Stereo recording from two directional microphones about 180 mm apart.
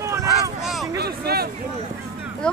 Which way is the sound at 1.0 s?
60° right (ahead or behind).